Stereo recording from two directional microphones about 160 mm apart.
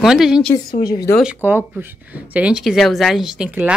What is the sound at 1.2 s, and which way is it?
A woman's voice, 10° right (ahead or behind).